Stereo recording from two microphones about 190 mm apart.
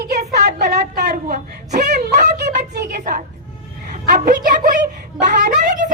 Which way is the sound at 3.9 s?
40° right (ahead or behind).